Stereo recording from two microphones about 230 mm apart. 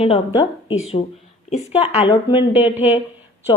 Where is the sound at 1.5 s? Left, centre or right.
Left.